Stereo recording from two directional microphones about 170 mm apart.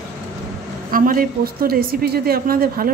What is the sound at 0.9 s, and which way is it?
A woman's voice, 55° right (ahead or behind).